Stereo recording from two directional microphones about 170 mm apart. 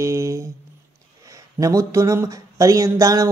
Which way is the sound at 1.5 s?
20° right (ahead or behind).